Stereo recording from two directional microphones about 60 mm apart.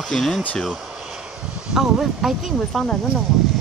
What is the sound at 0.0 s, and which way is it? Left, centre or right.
Speech, centre.